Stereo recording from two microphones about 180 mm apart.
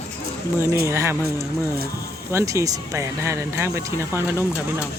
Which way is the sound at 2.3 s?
20° right (ahead or behind).